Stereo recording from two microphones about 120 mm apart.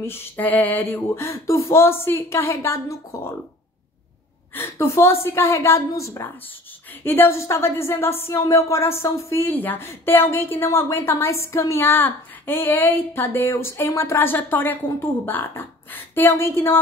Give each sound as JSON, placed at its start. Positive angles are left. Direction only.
{"t": 0.0, "sound": "speech", "side_deg": 15}
{"t": 4.6, "sound": "speech", "side_deg": 20}